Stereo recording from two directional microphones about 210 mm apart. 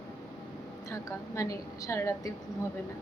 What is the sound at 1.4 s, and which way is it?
Speech, 15° left (ahead or behind).